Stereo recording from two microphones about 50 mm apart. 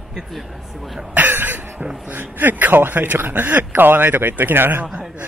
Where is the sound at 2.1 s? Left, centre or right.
Right.